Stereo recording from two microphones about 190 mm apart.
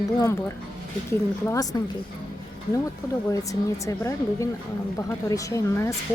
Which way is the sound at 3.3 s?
15° left (ahead or behind).